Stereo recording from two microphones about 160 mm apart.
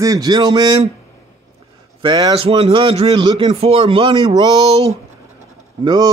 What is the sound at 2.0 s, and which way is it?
Speech, 25° right (ahead or behind).